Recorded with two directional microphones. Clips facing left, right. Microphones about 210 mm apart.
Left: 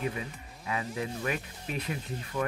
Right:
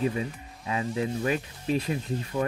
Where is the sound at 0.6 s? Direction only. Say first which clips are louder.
Right 5 dB; 30° right (ahead or behind).